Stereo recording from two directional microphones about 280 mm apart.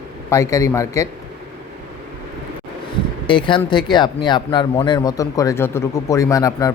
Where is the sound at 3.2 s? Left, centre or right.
Centre.